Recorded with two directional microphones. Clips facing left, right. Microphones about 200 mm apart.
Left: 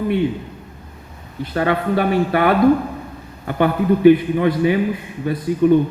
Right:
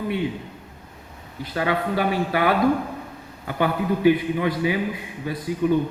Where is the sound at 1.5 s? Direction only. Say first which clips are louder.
Left 5 dB; 55° left (ahead or behind).